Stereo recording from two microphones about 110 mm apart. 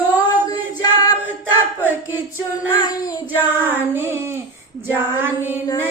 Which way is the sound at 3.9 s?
20° right (ahead or behind).